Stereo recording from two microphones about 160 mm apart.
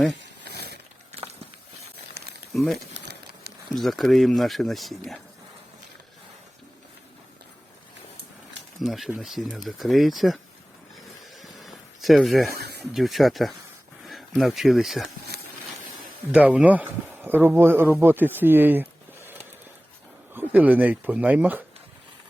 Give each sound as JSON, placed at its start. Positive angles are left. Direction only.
{"t": 0.4, "sound": "a sound", "side_deg": -90}
{"t": 2.5, "sound": "speech", "side_deg": 0}
{"t": 2.9, "sound": "pigeon", "side_deg": -90}
{"t": 3.8, "sound": "speech", "side_deg": 0}
{"t": 8.8, "sound": "speech", "side_deg": 0}
{"t": 11.6, "sound": "a sound", "side_deg": 0}
{"t": 12.5, "sound": "a sound", "side_deg": -90}
{"t": 12.8, "sound": "speech", "side_deg": 0}
{"t": 16.3, "sound": "speech", "side_deg": -10}